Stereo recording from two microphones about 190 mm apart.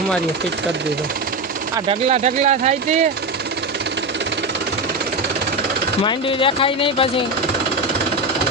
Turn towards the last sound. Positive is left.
turn(degrees=25)  # may be behind; listen again after turning